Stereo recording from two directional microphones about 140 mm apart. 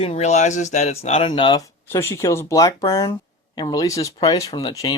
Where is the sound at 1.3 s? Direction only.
35° left (ahead or behind).